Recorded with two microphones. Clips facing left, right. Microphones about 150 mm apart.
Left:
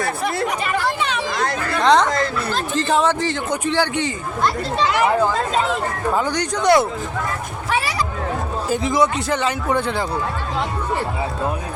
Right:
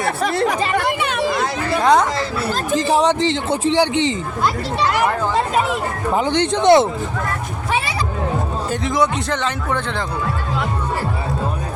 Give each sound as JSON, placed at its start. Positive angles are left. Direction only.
{"t": 0.0, "sound": "speech", "side_deg": -85}
{"t": 0.9, "sound": "a sound", "side_deg": -5}
{"t": 2.7, "sound": "speech", "side_deg": -15}
{"t": 6.1, "sound": "speech", "side_deg": -25}
{"t": 8.7, "sound": "a man's voice", "side_deg": 0}